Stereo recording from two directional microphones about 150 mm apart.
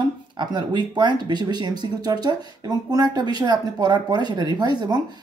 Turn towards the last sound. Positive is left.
turn(degrees=-30)  # may be behind; listen again after turning